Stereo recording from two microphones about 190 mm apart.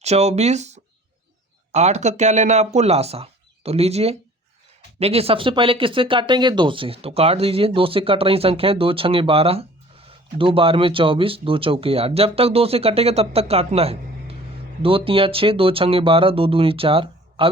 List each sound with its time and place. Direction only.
0.0 s speech: 35° right (ahead or behind)